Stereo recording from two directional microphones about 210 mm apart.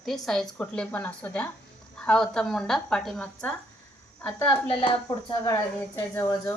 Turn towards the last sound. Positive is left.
turn(degrees=15)  # may be behind; listen again after turning